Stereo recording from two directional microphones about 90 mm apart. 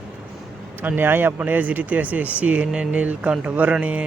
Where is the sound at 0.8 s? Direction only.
20° right (ahead or behind).